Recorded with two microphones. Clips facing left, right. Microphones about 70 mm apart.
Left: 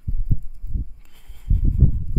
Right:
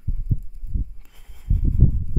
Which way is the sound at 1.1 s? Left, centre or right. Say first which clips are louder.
Left 1 dB; centre.